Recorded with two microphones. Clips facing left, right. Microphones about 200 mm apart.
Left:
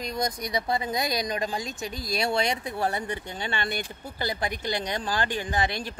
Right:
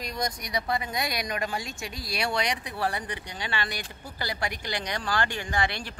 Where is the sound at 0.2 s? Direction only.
25° left (ahead or behind).